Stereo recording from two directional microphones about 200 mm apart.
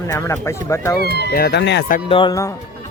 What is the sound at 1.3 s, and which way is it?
Speech, 55° left (ahead or behind).